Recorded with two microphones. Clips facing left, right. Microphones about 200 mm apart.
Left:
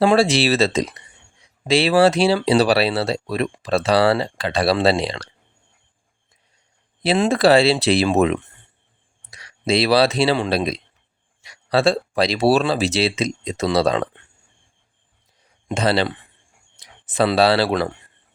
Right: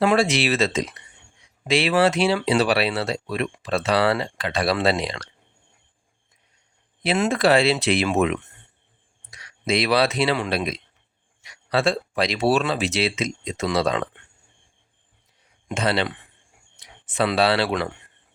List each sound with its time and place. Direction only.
0.0 s speech: 30° left (ahead or behind)
7.0 s speech: 35° left (ahead or behind)
15.7 s speech: 35° left (ahead or behind)